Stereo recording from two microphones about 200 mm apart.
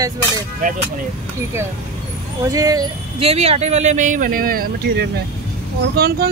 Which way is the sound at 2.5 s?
20° right (ahead or behind).